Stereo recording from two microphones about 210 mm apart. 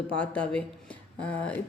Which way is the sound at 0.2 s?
5° left (ahead or behind).